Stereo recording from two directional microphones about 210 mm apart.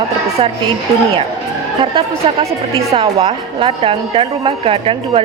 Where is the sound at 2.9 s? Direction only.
25° right (ahead or behind).